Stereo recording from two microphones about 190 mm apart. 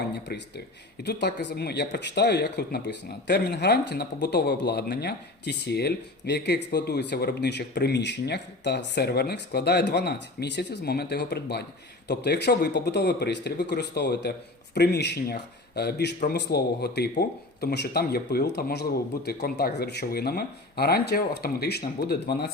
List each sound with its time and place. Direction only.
0.1 s speech: 60° left (ahead or behind)